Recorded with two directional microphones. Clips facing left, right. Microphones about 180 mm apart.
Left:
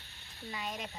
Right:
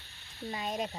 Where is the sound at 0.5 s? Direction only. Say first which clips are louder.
Right 6 dB; 40° right (ahead or behind).